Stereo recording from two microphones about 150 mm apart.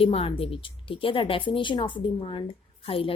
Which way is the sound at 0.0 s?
40° left (ahead or behind).